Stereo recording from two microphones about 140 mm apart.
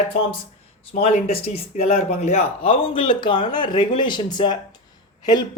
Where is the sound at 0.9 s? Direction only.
45° left (ahead or behind).